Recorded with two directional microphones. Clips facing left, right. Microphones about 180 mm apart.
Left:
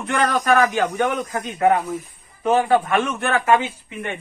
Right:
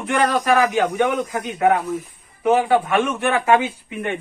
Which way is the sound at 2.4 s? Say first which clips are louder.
Right 1 dB; 5° right (ahead or behind).